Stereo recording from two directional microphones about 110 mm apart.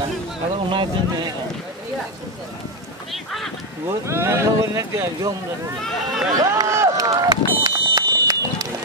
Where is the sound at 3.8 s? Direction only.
25° right (ahead or behind).